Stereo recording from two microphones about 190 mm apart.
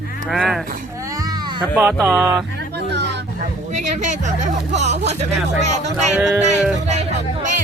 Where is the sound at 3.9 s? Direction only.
40° right (ahead or behind).